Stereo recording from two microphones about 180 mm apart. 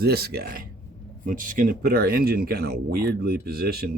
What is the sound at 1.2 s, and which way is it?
Speech, 50° right (ahead or behind).